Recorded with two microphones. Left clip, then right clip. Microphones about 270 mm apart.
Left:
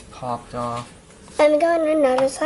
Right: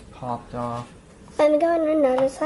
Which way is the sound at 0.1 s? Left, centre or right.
Centre.